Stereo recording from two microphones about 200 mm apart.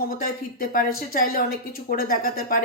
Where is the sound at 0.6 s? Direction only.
45° left (ahead or behind).